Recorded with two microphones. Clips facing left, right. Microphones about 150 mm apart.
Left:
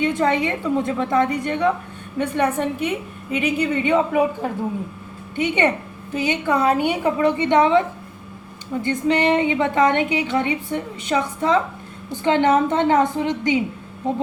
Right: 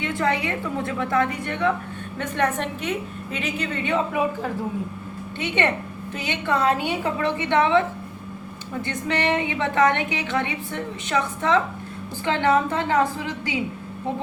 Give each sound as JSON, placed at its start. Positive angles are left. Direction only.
{"t": 0.0, "sound": "a woman's voice", "side_deg": 20}
{"t": 5.4, "sound": "a woman's voice", "side_deg": 15}
{"t": 8.9, "sound": "a woman's voice", "side_deg": 15}